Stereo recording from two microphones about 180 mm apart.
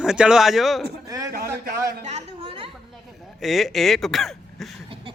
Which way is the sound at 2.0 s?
35° right (ahead or behind).